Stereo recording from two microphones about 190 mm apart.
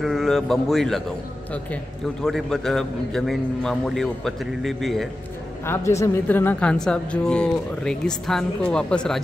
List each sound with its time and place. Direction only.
0.0 s a woman's voice: centre (ahead or behind)
2.2 s a woman's voice: centre (ahead or behind)
5.7 s a woman's voice: 15° left (ahead or behind)